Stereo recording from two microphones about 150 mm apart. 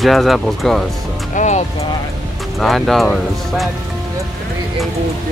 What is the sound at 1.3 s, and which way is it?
Speech, 55° left (ahead or behind).